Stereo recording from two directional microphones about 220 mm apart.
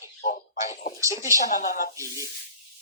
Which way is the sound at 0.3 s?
35° left (ahead or behind).